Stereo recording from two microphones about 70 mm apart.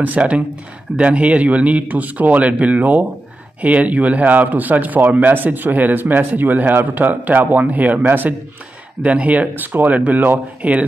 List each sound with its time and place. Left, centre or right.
0.0 s speech: centre